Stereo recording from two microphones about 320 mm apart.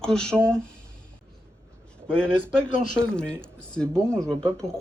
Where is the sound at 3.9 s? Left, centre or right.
Centre.